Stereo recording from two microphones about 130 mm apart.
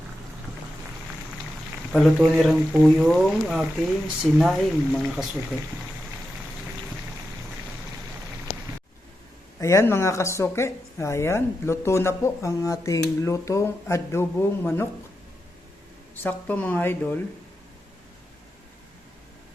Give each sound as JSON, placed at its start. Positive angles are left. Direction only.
{"t": 1.9, "sound": "speech", "side_deg": 0}
{"t": 9.6, "sound": "speech", "side_deg": 20}
{"t": 16.1, "sound": "speech", "side_deg": 15}